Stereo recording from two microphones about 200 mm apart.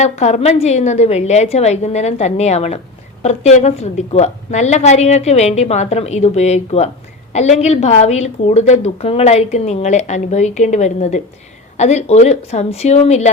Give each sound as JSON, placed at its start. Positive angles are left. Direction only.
{"t": 0.0, "sound": "a woman's voice", "side_deg": 35}